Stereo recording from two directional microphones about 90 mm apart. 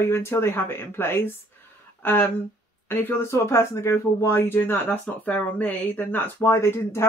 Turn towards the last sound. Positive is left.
turn(degrees=30)  # may be behind; listen again after turning